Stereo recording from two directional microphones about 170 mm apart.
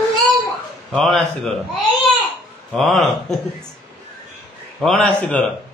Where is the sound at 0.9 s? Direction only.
Centre (ahead or behind).